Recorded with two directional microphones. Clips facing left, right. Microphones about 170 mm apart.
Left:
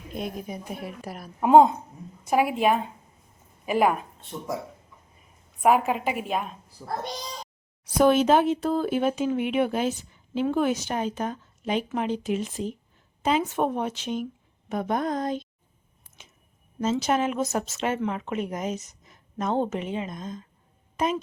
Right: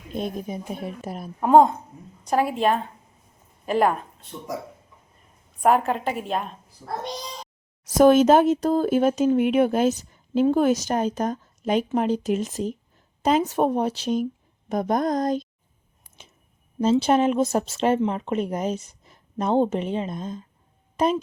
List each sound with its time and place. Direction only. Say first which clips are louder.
0.1 s speech: right 4 dB; 25° right (ahead or behind)
1.4 s a woman's voice: even; 10° left (ahead or behind)
5.6 s a woman's voice: right 1 dB; 5° left (ahead or behind)
7.9 s speech: right 4 dB; 45° right (ahead or behind)
16.8 s speech: right 5 dB; 30° right (ahead or behind)